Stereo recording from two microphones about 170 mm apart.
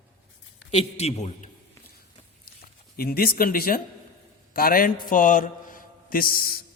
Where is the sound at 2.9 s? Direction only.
60° left (ahead or behind).